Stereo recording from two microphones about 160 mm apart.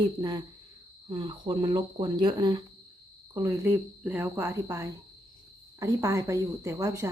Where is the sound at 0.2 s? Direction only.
25° right (ahead or behind).